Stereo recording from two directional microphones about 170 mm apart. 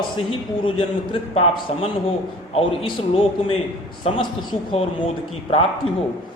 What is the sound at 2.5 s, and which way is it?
A man's voice, 35° left (ahead or behind).